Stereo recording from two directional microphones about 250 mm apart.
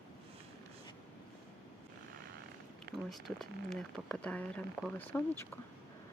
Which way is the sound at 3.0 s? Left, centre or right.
Centre.